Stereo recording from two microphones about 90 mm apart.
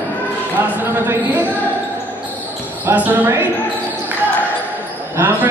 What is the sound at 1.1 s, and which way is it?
Speech, 20° right (ahead or behind).